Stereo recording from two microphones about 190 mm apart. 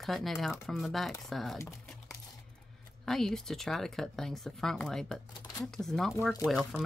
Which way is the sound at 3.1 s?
Centre (ahead or behind).